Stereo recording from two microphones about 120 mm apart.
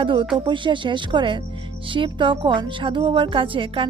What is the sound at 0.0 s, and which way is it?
Speech, 45° right (ahead or behind).